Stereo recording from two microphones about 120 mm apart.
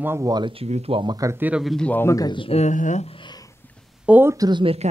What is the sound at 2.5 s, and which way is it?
Speech, 80° left.